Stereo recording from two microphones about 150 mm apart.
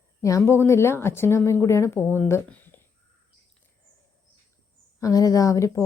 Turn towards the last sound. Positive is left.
turn(degrees=20)  # may be behind; listen again after turning